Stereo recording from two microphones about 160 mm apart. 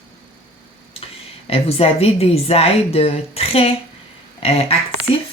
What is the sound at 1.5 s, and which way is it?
Speech, 40° left (ahead or behind).